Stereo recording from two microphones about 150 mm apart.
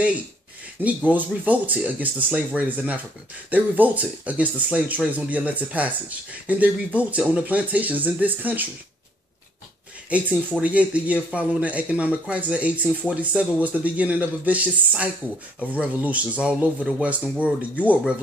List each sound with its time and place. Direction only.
0.8 s speech: 10° right (ahead or behind)
10.6 s speech: 10° right (ahead or behind)